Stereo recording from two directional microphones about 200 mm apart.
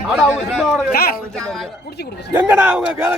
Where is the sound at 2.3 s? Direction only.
10° right (ahead or behind).